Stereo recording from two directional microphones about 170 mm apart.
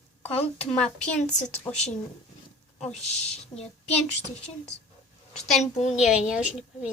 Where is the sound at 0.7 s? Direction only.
5° left (ahead or behind).